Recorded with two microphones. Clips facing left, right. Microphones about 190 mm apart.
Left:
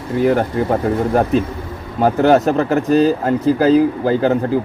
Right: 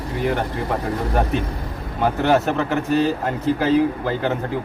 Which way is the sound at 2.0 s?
40° left (ahead or behind).